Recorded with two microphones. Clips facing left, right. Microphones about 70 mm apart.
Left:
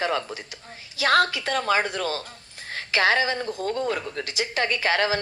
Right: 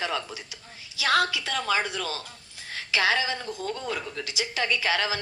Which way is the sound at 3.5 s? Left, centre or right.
Left.